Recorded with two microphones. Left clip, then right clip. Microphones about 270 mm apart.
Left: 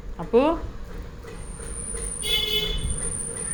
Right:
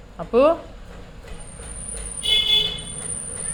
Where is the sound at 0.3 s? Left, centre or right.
Centre.